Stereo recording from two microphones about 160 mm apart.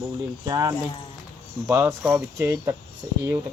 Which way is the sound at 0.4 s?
25° right (ahead or behind).